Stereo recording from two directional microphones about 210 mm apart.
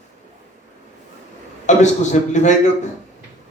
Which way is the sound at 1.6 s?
35° left (ahead or behind).